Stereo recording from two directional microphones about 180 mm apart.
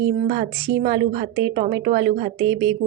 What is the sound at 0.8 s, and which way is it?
A woman's voice, 40° right (ahead or behind).